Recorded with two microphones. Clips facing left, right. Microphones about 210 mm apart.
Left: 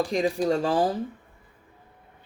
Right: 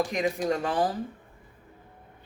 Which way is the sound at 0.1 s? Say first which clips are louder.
Left 3 dB; 30° left (ahead or behind).